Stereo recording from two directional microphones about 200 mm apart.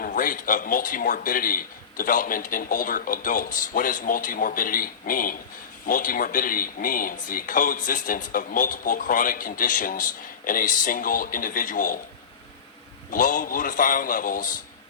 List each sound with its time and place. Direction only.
0.0 s a man's voice: 40° left (ahead or behind)
13.1 s speech: 40° left (ahead or behind)